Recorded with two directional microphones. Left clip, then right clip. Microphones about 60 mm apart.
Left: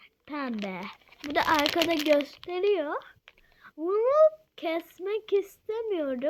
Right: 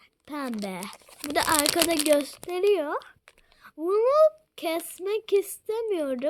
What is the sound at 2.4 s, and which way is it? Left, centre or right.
A child's voice, right.